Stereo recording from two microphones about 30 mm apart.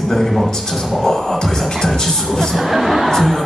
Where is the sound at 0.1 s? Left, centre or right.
Centre.